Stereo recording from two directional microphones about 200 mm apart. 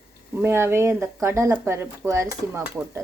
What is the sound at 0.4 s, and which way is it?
Stir, 15° right (ahead or behind).